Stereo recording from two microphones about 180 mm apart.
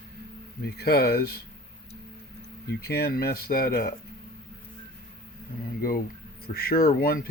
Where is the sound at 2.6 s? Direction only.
60° left (ahead or behind).